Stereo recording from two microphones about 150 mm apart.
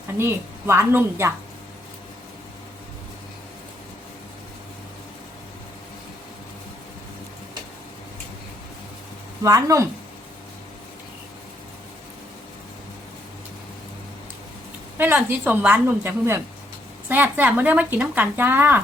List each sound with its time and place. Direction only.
0.2 s speech: 15° right (ahead or behind)
9.4 s speech: 20° right (ahead or behind)
14.9 s speech: 10° right (ahead or behind)